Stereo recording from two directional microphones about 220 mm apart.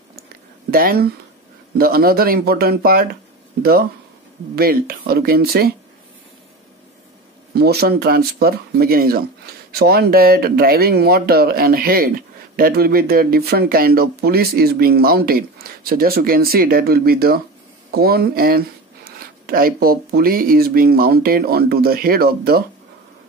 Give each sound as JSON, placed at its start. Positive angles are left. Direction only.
{"t": 0.7, "sound": "speech", "side_deg": -40}
{"t": 4.6, "sound": "speech", "side_deg": -45}
{"t": 7.5, "sound": "speech", "side_deg": -45}